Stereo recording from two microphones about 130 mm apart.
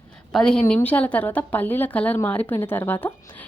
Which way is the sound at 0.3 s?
5° left (ahead or behind).